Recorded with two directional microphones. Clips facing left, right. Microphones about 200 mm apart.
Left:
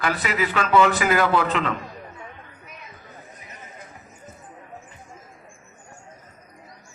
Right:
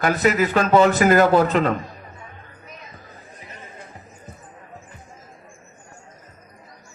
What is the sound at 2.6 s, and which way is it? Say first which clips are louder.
Music: right 4 dB; 35° right (ahead or behind).